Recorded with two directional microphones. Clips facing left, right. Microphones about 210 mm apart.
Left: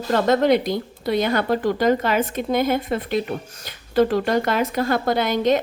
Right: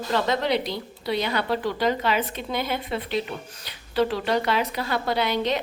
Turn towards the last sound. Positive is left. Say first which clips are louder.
# left 5 dB
turn(degrees=45)  # may be behind; listen again after turning